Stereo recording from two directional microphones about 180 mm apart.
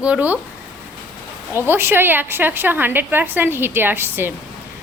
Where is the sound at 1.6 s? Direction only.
15° right (ahead or behind).